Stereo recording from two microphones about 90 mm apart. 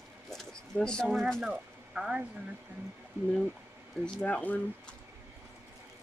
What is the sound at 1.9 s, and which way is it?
Speech, 10° right (ahead or behind).